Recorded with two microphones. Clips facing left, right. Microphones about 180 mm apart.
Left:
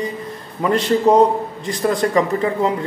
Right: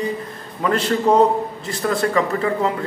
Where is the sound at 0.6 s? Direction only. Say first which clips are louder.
Left 3 dB; 10° left (ahead or behind).